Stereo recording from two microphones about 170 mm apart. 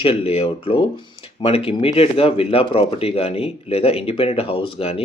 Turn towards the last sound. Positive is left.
turn(degrees=35)  # may be behind; listen again after turning